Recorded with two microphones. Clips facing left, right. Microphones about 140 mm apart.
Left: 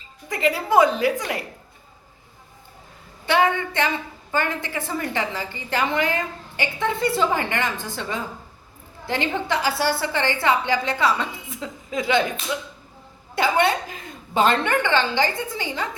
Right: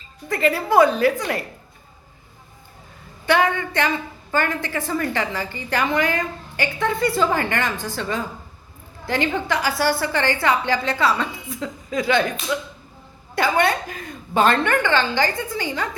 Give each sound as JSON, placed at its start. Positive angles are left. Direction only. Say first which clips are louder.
{"t": 0.3, "sound": "a woman's voice", "louder": "right 2 dB", "side_deg": 15}
{"t": 3.2, "sound": "a woman's voice", "louder": "right 1 dB", "side_deg": 25}
{"t": 13.3, "sound": "a woman's voice", "louder": "right 1 dB", "side_deg": 20}